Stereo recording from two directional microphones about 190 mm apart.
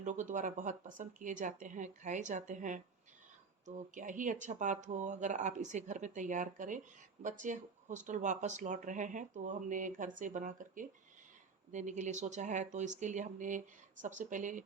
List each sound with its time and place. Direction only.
0.0 s speech: 40° right (ahead or behind)